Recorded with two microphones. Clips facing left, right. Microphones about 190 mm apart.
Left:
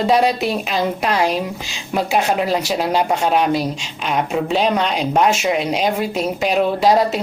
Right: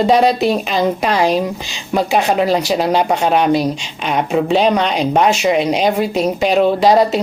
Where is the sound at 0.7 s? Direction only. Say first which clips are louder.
Right 3 dB; centre (ahead or behind).